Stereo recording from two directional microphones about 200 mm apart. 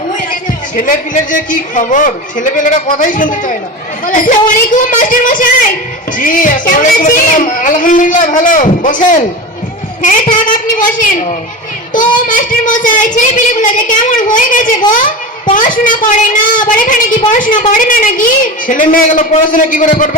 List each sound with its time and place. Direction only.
0.8 s a woman's voice: 40° left (ahead or behind)